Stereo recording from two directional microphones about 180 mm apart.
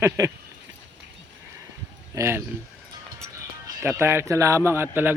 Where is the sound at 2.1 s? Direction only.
15° right (ahead or behind).